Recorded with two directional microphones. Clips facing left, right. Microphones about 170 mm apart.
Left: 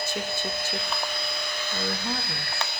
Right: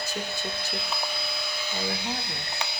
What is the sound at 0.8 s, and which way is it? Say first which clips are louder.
Speech: left 1 dB; 5° right (ahead or behind).